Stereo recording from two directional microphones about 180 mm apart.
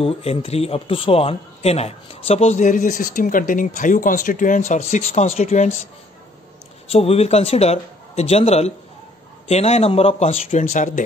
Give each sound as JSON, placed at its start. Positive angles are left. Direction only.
{"t": 0.0, "sound": "a man's voice", "side_deg": 35}
{"t": 6.9, "sound": "a man's voice", "side_deg": 35}